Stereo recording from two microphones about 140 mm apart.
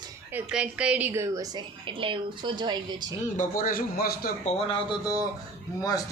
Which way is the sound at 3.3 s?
85° left.